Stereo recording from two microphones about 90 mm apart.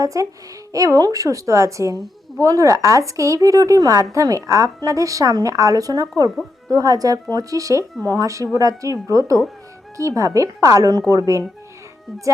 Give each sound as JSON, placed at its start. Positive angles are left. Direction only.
{"t": 0.0, "sound": "a woman's voice", "side_deg": -40}